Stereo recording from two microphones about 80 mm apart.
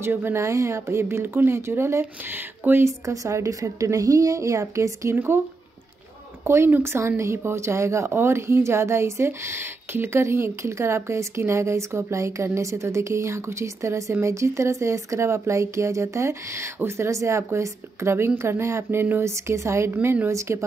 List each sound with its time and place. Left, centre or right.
0.0 s speech: right
3.1 s speech: right
5.1 s speech: right
6.4 s speech: right